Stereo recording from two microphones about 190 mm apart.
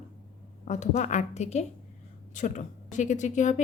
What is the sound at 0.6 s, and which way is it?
A woman's voice, 40° left (ahead or behind).